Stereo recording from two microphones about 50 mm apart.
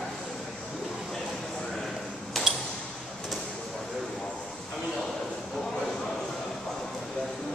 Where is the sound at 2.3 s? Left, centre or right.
Centre.